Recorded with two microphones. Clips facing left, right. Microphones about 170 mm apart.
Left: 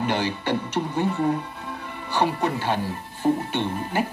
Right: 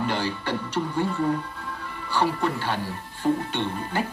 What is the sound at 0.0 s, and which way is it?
Speech, 15° left (ahead or behind).